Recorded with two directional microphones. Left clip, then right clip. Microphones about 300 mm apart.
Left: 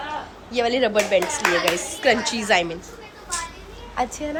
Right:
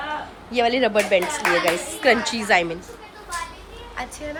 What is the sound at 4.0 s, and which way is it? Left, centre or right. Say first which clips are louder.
Speech: left 7 dB; centre.